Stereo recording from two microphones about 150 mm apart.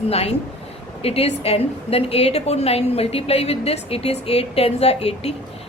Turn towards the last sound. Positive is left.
turn(degrees=45)  # may be behind; listen again after turning